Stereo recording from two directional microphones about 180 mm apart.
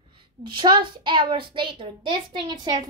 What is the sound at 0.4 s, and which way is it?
A woman's voice, 25° right (ahead or behind).